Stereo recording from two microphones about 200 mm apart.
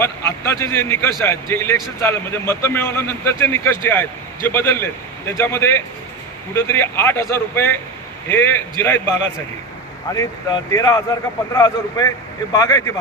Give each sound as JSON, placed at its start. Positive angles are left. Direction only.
{"t": 0.0, "sound": "a man's voice", "side_deg": 10}
{"t": 10.2, "sound": "a man's voice", "side_deg": 15}